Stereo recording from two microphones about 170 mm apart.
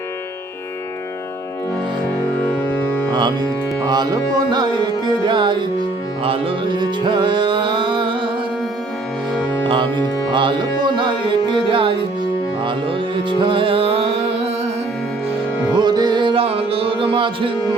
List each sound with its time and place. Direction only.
3.2 s music: 25° right (ahead or behind)
9.6 s music: 30° right (ahead or behind)
15.7 s music: 25° right (ahead or behind)